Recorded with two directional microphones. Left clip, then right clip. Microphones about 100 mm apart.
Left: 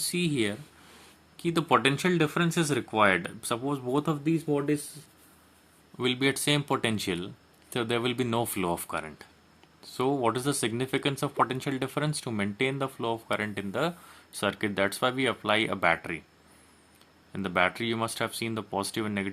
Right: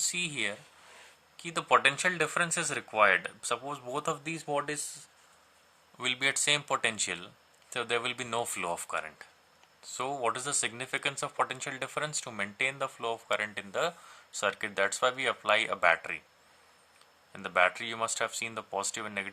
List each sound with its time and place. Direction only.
0.1 s speech: 15° left (ahead or behind)
4.1 s speech: centre (ahead or behind)
6.0 s speech: 20° left (ahead or behind)
17.3 s speech: 20° left (ahead or behind)